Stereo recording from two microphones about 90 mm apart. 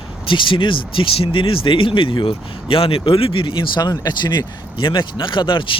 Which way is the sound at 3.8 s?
50° left (ahead or behind).